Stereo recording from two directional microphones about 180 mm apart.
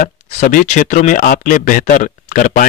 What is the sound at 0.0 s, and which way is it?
Speech, 45° left (ahead or behind).